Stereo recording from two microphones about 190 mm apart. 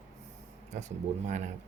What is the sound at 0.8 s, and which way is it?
Speech, 40° right (ahead or behind).